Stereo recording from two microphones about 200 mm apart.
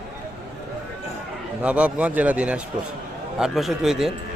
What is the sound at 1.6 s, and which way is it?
A man's voice, 5° right (ahead or behind).